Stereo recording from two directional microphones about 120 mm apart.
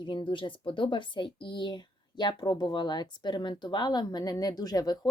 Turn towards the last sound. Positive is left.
turn(degrees=30)  # may be behind; listen again after turning